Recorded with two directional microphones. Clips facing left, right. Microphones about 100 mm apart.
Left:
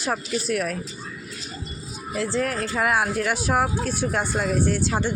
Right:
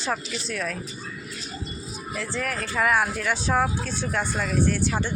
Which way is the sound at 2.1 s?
10° left (ahead or behind).